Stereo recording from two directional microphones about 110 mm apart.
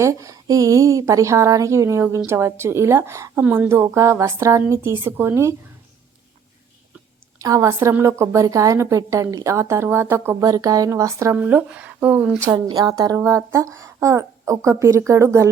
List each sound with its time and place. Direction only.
0.0 s speech: 30° right (ahead or behind)
7.3 s a woman's voice: 30° right (ahead or behind)
10.4 s speech: 35° right (ahead or behind)
11.3 s speech: 15° right (ahead or behind)
12.5 s speech: 35° right (ahead or behind)